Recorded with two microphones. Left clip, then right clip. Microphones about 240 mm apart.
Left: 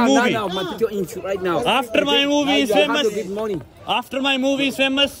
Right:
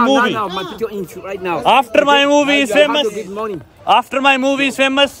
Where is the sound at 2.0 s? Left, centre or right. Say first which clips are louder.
Right 7 dB; right.